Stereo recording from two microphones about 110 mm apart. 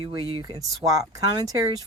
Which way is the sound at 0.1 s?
45° right (ahead or behind).